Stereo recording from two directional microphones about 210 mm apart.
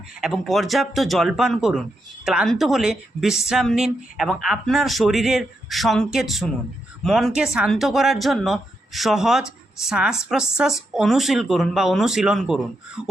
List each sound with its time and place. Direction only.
0.2 s speech: centre (ahead or behind)